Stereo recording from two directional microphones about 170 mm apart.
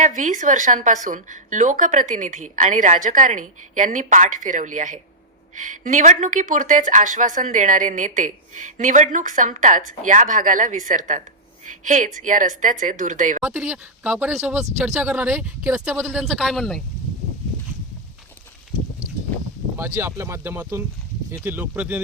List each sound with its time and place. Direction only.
0.0 s speech: 45° right (ahead or behind)
13.4 s speech: 5° right (ahead or behind)
19.7 s speech: 15° right (ahead or behind)